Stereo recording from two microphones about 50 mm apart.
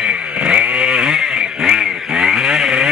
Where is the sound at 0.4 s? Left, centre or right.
Right.